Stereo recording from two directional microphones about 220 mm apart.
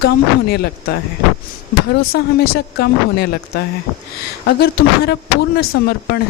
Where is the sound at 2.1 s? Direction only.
45° left (ahead or behind).